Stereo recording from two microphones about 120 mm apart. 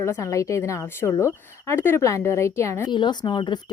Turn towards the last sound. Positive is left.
turn(degrees=40)  # may be behind; listen again after turning